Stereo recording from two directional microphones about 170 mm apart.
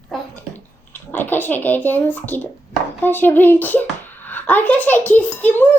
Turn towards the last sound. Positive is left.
turn(degrees=10)  # may be behind; listen again after turning